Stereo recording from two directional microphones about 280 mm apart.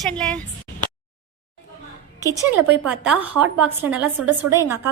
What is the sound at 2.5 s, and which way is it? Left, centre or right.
Speech, centre.